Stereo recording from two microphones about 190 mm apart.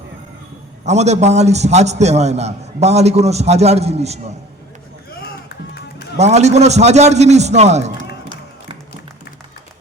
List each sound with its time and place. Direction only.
0.9 s a man's voice: 35° right (ahead or behind)
6.1 s a man's voice: 35° right (ahead or behind)